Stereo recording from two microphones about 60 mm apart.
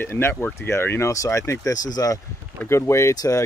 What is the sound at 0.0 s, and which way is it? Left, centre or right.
Speech, left.